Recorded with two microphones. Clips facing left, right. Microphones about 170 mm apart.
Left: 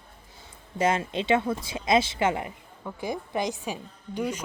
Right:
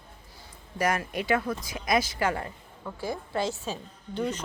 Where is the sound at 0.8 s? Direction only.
25° left (ahead or behind).